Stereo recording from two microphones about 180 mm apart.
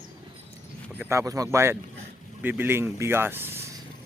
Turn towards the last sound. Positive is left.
turn(degrees=-15)  # may be behind; listen again after turning